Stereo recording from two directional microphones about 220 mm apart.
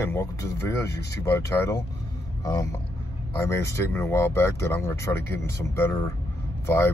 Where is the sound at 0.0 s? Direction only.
10° left (ahead or behind).